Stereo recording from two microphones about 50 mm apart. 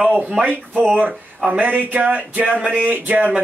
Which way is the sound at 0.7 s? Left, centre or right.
Right.